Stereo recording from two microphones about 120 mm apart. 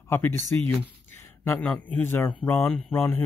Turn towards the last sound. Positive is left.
turn(degrees=15)  # may be behind; listen again after turning